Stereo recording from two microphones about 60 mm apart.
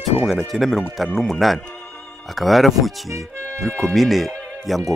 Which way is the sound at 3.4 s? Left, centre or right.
Right.